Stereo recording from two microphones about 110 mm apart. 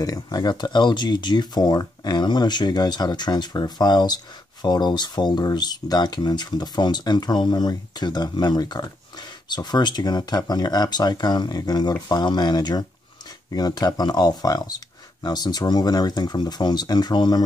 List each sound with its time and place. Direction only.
0.0 s speech: 35° left (ahead or behind)